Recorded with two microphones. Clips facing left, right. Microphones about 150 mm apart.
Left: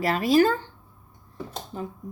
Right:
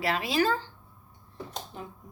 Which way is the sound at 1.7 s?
40° left (ahead or behind).